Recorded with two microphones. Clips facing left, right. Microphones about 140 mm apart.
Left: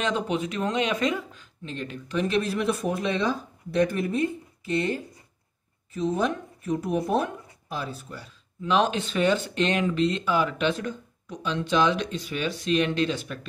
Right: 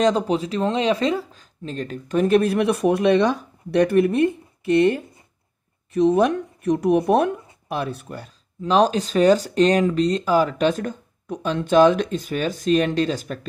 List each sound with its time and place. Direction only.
0.0 s speech: 35° right (ahead or behind); by 8.3 s 60° right (ahead or behind)
8.6 s speech: 40° right (ahead or behind)